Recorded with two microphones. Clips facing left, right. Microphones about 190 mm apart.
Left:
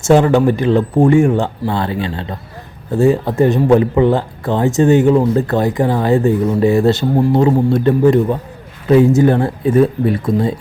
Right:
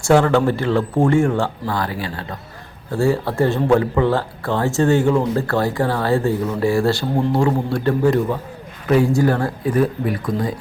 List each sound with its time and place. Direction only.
0.0 s speech: 20° left (ahead or behind)